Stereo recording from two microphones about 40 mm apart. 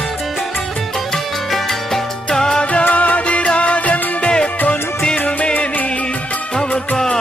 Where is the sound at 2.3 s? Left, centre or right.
Centre.